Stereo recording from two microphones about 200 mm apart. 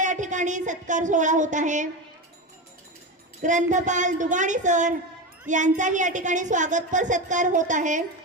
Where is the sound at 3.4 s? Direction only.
40° right (ahead or behind).